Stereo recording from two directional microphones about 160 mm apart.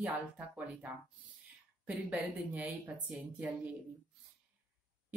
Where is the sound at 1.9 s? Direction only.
10° right (ahead or behind).